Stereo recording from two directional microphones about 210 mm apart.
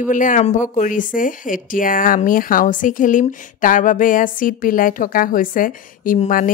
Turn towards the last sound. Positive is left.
turn(degrees=40)  # may be behind; listen again after turning